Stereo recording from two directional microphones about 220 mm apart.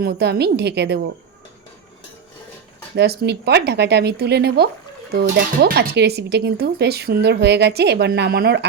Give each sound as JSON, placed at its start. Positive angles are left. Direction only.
{"t": 0.0, "sound": "speech", "side_deg": -45}
{"t": 2.9, "sound": "speech", "side_deg": -50}